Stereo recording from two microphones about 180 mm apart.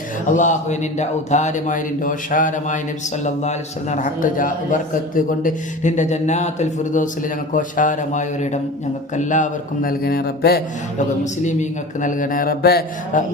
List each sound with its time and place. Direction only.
0.3 s a man's voice: 45° left (ahead or behind); by 10.6 s 60° left (ahead or behind)
10.9 s a man's voice: 40° left (ahead or behind); by 13.2 s 55° left (ahead or behind)